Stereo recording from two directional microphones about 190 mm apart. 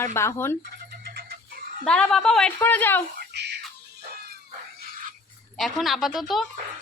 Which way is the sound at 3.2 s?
60° right (ahead or behind).